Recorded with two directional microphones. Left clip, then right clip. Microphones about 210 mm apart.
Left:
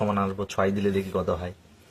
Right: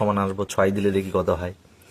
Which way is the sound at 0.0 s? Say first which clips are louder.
Right 4 dB; 40° right (ahead or behind).